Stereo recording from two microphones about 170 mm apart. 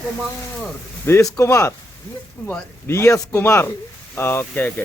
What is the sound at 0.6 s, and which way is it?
Speech, 15° left (ahead or behind).